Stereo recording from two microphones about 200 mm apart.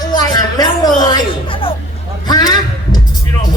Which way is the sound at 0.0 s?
20° left (ahead or behind).